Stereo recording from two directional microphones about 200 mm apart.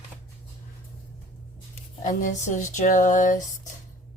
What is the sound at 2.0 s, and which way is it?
A woman's voice, 40° left (ahead or behind).